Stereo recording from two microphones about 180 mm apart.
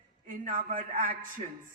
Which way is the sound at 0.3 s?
45° right (ahead or behind).